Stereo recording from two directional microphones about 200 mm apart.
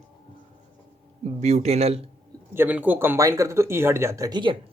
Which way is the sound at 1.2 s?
35° right (ahead or behind).